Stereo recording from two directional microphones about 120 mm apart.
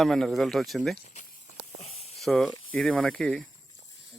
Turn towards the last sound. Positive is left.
turn(degrees=5)  # may be behind; listen again after turning